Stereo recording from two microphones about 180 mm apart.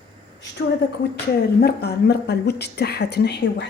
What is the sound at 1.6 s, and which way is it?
A woman's voice, 65° left (ahead or behind).